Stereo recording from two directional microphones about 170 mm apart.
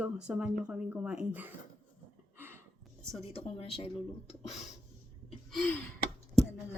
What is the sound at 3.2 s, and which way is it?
Speech, 35° left (ahead or behind).